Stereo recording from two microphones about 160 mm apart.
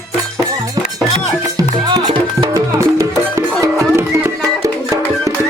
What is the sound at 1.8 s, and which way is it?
Music, 30° right (ahead or behind).